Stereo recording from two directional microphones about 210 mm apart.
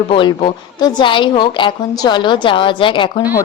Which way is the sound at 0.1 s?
25° left (ahead or behind).